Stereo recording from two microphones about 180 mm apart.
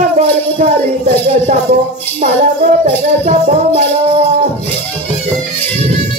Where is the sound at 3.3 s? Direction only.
35° right (ahead or behind).